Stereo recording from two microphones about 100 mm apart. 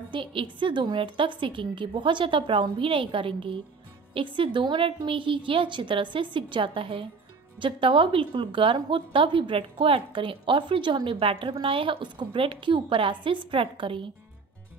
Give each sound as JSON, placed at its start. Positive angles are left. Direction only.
{"t": 0.1, "sound": "a woman's voice", "side_deg": -60}